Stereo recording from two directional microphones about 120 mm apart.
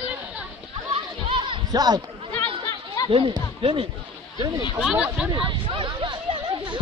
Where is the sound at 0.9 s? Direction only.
45° right (ahead or behind).